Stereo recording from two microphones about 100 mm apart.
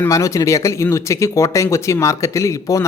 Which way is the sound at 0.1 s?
35° left (ahead or behind).